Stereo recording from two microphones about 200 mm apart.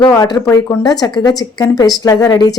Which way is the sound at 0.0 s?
20° left (ahead or behind).